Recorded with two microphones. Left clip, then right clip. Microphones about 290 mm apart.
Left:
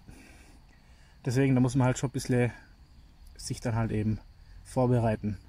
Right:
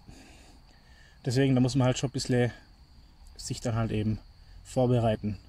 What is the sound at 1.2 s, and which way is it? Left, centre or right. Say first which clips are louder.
Speech: right 1 dB; centre.